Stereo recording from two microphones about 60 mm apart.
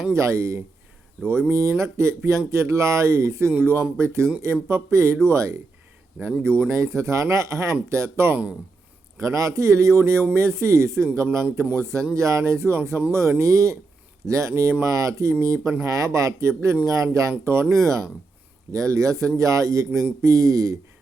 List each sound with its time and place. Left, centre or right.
0.1 s speech: right
6.7 s speech: right
9.2 s speech: right